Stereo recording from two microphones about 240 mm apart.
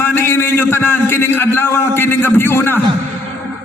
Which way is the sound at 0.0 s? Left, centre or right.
Centre.